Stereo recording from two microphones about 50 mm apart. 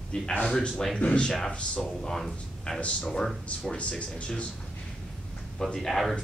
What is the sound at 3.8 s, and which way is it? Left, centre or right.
Speech, left.